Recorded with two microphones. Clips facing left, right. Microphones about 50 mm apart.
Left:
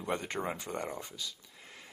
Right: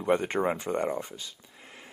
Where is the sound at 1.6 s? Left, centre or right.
Centre.